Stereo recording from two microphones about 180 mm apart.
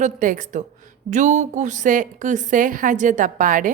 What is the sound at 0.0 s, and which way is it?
A woman's voice, 45° right (ahead or behind).